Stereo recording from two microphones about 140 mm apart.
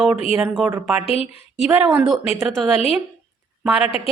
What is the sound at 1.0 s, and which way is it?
Speech, 45° left (ahead or behind).